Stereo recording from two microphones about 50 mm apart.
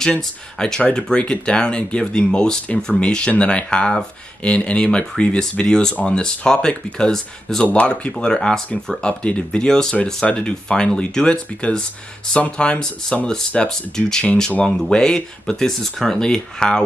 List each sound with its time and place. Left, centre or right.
0.0 s speech: centre
7.6 s speech: left
13.7 s speech: centre